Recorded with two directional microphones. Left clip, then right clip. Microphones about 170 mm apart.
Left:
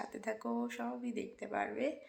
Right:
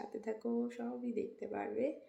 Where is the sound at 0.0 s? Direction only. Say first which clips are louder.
Left 1 dB; 5° right (ahead or behind).